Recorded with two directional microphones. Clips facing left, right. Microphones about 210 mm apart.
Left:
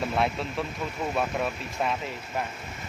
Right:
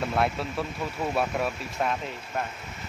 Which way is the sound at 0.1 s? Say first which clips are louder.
Even; centre (ahead or behind).